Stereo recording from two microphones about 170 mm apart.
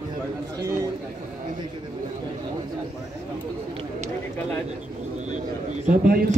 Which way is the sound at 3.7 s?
45° right (ahead or behind).